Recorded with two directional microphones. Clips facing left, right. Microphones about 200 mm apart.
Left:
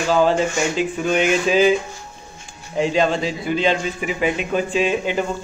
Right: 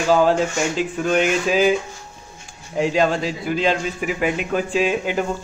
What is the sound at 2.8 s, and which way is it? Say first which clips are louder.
A man's voice: even; 5° right (ahead or behind).